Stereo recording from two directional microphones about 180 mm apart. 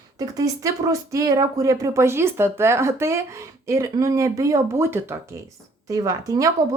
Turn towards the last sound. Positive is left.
turn(degrees=-20)  # may be behind; listen again after turning